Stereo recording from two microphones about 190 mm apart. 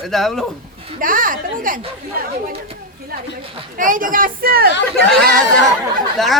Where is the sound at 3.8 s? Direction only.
45° right (ahead or behind).